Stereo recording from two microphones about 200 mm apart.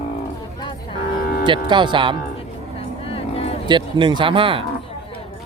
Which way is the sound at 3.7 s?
25° right (ahead or behind).